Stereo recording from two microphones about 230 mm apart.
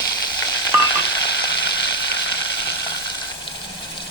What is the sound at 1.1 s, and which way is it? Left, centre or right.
Frying, left.